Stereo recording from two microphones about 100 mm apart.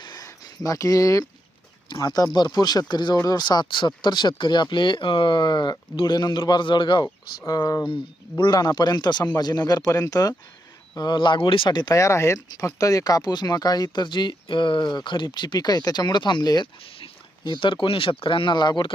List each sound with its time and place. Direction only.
0.0 s a sound: 40° left (ahead or behind)
2.0 s speech: 40° left (ahead or behind)
7.4 s speech: 40° left (ahead or behind)
11.9 s speech: 30° left (ahead or behind); by 18.9 s 50° left (ahead or behind)